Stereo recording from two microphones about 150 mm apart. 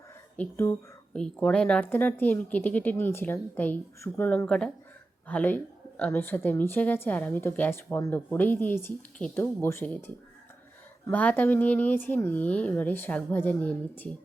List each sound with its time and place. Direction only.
0.3 s a woman's voice: 15° left (ahead or behind)
11.1 s a woman's voice: 10° left (ahead or behind)